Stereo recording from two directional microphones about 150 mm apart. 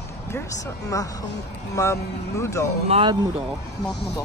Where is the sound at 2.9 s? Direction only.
40° right (ahead or behind).